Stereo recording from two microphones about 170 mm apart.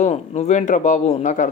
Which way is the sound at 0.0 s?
40° left (ahead or behind).